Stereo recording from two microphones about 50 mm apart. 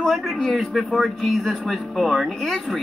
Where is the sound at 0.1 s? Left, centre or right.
Centre.